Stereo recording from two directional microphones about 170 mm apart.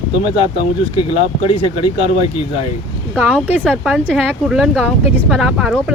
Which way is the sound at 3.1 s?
10° left (ahead or behind).